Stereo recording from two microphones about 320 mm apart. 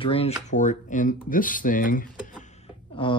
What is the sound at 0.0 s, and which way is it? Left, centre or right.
Speech, centre.